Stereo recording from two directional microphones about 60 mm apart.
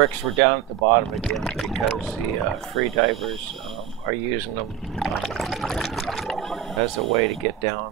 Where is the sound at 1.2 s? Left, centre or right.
Centre.